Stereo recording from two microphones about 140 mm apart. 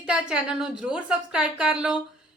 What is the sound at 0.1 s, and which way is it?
A woman's voice, 5° right (ahead or behind).